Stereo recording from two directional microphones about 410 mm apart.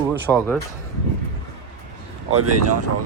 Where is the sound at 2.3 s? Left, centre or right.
Right.